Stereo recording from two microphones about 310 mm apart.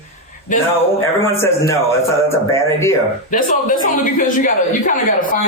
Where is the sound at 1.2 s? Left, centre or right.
Centre.